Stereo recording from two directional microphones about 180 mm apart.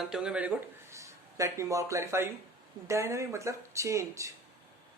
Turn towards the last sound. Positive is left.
turn(degrees=-15)  # may be behind; listen again after turning